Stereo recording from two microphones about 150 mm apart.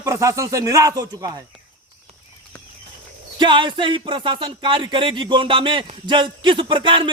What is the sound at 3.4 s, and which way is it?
Music, 30° right (ahead or behind).